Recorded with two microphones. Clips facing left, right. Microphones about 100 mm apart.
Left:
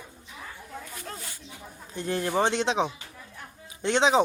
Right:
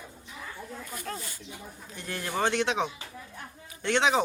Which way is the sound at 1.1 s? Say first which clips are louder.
Right 4 dB; 25° left (ahead or behind).